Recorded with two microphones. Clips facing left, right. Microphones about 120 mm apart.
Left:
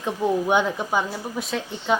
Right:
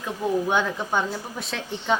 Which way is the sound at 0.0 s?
15° left (ahead or behind).